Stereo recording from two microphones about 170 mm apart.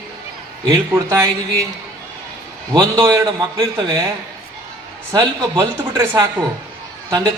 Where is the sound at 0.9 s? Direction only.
15° right (ahead or behind).